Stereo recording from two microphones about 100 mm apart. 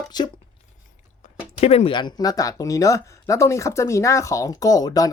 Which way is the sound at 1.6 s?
90° left.